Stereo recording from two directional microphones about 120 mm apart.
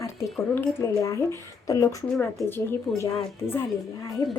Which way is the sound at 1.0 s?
25° left (ahead or behind).